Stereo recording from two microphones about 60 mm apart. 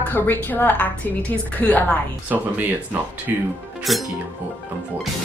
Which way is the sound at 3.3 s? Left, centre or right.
Right.